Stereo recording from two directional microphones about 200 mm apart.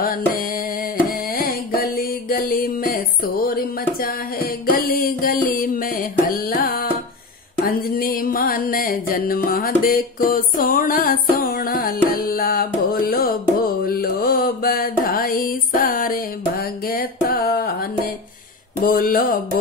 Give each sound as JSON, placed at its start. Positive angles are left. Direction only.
{"t": 0.0, "sound": "mantra", "side_deg": 45}
{"t": 1.3, "sound": "music", "side_deg": 50}
{"t": 13.8, "sound": "mantra", "side_deg": 50}
{"t": 18.8, "sound": "music", "side_deg": 45}